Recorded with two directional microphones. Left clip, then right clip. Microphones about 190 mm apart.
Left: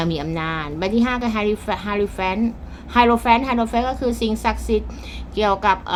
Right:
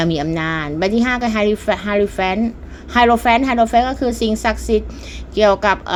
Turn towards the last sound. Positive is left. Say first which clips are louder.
# right 4 dB
turn(degrees=-25)  # may be behind; listen again after turning